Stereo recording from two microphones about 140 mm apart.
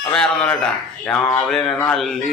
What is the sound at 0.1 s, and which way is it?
Speech, 5° left (ahead or behind).